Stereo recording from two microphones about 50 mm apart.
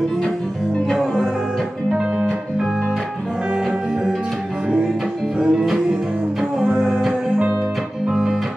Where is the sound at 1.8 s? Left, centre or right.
Centre.